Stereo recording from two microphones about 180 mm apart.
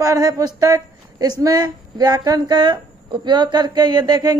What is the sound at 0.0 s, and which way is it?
A woman's voice, 20° right (ahead or behind).